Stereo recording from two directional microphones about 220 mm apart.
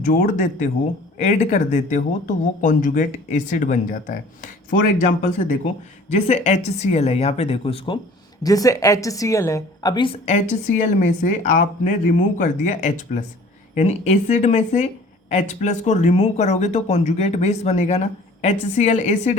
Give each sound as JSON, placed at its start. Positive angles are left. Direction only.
{"t": 0.0, "sound": "speech", "side_deg": 40}
{"t": 6.1, "sound": "a woman's voice", "side_deg": 30}
{"t": 8.4, "sound": "a woman's voice", "side_deg": 15}